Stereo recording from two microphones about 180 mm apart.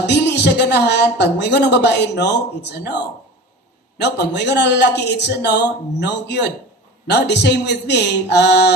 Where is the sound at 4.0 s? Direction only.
70° left (ahead or behind).